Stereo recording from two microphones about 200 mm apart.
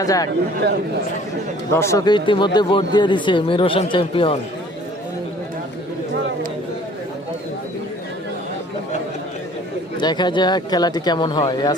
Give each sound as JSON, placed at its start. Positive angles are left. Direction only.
{"t": 0.0, "sound": "speech", "side_deg": 15}
{"t": 1.7, "sound": "a man's voice", "side_deg": 15}
{"t": 10.0, "sound": "a man's voice", "side_deg": 20}